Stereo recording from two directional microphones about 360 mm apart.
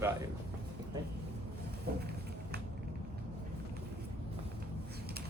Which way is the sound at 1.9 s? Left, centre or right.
Right.